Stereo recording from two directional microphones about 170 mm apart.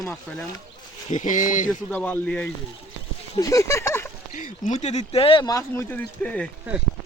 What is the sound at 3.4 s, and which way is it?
Speech, 20° left (ahead or behind).